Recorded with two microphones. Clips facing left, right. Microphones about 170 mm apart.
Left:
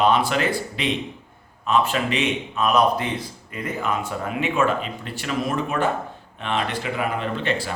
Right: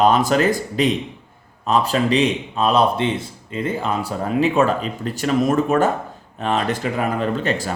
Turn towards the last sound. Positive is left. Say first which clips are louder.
# right 4 dB
turn(degrees=-40)  # may be behind; listen again after turning